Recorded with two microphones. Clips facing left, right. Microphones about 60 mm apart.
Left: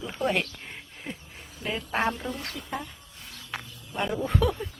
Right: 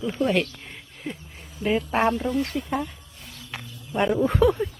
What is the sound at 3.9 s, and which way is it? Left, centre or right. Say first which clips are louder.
Speech: right 6 dB; right.